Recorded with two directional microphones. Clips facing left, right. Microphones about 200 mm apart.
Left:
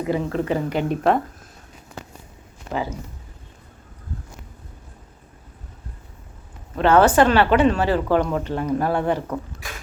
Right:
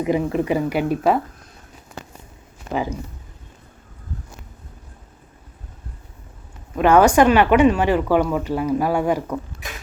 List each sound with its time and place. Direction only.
0.0 s speech: 15° right (ahead or behind)
6.7 s speech: 10° right (ahead or behind)
9.6 s beatboxing: 20° right (ahead or behind)